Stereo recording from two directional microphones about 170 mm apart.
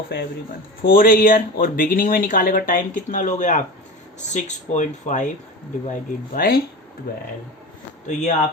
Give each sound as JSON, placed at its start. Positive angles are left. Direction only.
{"t": 0.1, "sound": "speech", "side_deg": 75}
{"t": 0.8, "sound": "speech", "side_deg": 60}
{"t": 5.9, "sound": "speech", "side_deg": 60}
{"t": 8.1, "sound": "speech", "side_deg": 45}